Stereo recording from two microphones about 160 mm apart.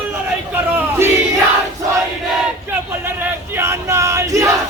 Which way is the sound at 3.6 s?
15° right (ahead or behind).